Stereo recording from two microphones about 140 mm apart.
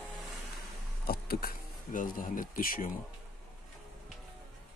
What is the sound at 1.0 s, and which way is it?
Speech, 90° left.